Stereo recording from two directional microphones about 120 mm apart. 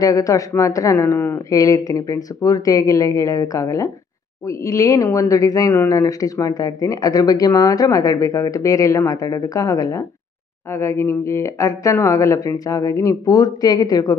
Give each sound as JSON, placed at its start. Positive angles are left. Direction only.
{"t": 0.0, "sound": "speech", "side_deg": 30}